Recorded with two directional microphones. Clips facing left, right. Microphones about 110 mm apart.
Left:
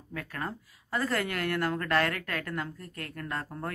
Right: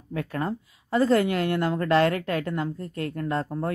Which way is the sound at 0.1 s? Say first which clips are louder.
Right 8 dB; 30° right (ahead or behind).